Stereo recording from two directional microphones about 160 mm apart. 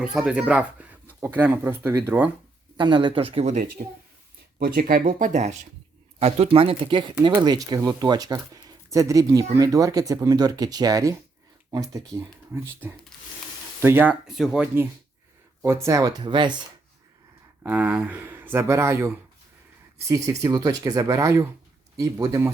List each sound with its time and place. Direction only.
0.0 s speech: 5° right (ahead or behind)
2.7 s speech: 30° right (ahead or behind)
4.6 s speech: 65° right (ahead or behind); by 14.8 s 5° right (ahead or behind)
15.6 s speech: 15° right (ahead or behind)
17.6 s speech: 10° right (ahead or behind)